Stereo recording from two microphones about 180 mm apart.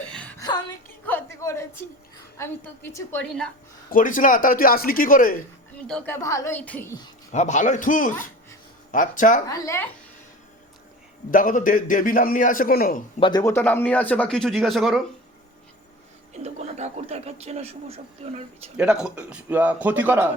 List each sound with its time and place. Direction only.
0.1 s music: 5° left (ahead or behind)
0.3 s a sound: 20° left (ahead or behind)
2.4 s speech: 15° left (ahead or behind)
3.8 s a man's voice: 50° left (ahead or behind)
5.9 s speech: 10° left (ahead or behind)
7.3 s a man's voice: 40° left (ahead or behind)
9.5 s speech: 15° left (ahead or behind)
11.3 s a man's voice: 50° left (ahead or behind)
13.1 s speech: 25° left (ahead or behind)
13.4 s speech: 10° left (ahead or behind)
16.3 s speech: 35° right (ahead or behind)
18.8 s a man's voice: 5° right (ahead or behind)